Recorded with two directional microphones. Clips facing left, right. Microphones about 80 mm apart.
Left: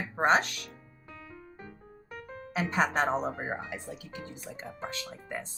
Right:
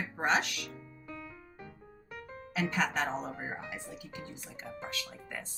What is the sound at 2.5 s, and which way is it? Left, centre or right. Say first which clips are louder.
Speech: left 4 dB; left.